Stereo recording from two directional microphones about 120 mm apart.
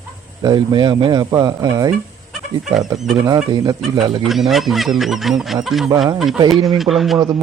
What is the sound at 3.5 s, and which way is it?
Speech, 35° right (ahead or behind).